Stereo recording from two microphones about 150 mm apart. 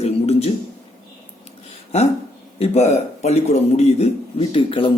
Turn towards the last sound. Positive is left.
turn(degrees=35)  # may be behind; listen again after turning